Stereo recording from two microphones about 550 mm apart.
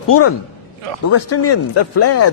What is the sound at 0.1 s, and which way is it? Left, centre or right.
Speech, left.